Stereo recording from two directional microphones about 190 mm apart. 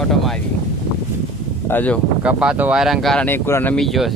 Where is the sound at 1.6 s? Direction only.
10° left (ahead or behind).